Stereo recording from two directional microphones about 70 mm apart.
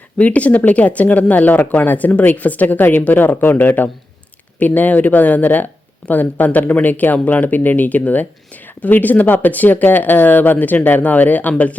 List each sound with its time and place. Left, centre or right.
0.2 s speech: centre